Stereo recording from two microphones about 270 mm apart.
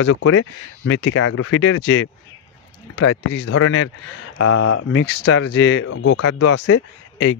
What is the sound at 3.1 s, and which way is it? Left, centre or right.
Speech, left.